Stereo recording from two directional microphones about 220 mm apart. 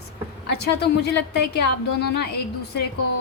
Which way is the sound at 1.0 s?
50° left (ahead or behind).